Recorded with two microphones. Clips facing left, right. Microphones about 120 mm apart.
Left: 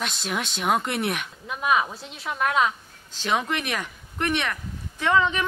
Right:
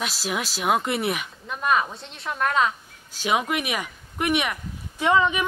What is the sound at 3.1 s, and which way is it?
Speech, 10° right (ahead or behind).